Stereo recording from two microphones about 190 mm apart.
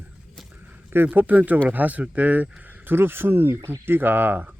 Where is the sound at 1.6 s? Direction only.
10° right (ahead or behind).